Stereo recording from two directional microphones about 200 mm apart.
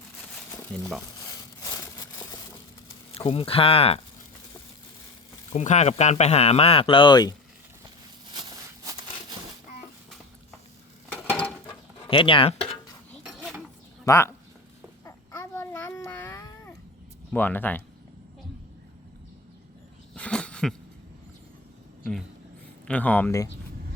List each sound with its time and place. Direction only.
1.6 s a sound: 15° left (ahead or behind)
3.2 s speech: 30° left (ahead or behind)
5.5 s speech: 35° left (ahead or behind); by 7.3 s 20° left (ahead or behind)
8.3 s a sound: 20° right (ahead or behind)
12.0 s speech: 25° left (ahead or behind)
13.2 s dishes: centre (ahead or behind)
14.0 s speech: 15° left (ahead or behind)
15.0 s babbling: 15° left (ahead or behind)
17.3 s speech: 10° left (ahead or behind)
20.1 s a sound: 5° left (ahead or behind)
22.9 s speech: 10° left (ahead or behind)